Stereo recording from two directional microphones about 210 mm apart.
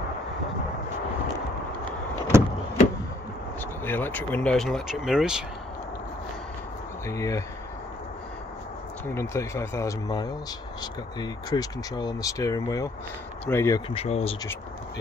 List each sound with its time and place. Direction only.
2.3 s power windows: 10° right (ahead or behind)
3.8 s speech: 10° left (ahead or behind)
7.1 s speech: 15° left (ahead or behind)
9.0 s speech: 10° left (ahead or behind); by 14.3 s 30° left (ahead or behind)